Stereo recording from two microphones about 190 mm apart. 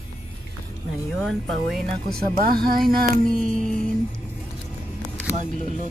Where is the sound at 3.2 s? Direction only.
5° left (ahead or behind).